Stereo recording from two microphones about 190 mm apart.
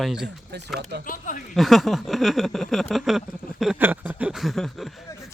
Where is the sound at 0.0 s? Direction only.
Centre (ahead or behind).